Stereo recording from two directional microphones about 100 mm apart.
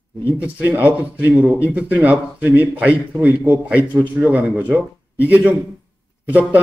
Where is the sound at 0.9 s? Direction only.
15° right (ahead or behind).